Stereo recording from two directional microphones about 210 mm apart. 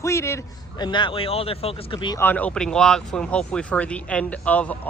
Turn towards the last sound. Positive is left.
turn(degrees=5)  # may be behind; listen again after turning